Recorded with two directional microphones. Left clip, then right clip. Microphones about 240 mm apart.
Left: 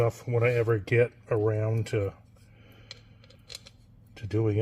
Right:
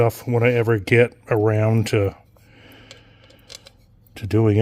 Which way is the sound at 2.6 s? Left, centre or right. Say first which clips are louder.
Right 11 dB; right.